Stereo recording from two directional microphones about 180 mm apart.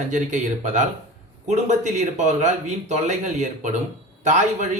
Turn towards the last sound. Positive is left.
turn(degrees=-45)  # may be behind; listen again after turning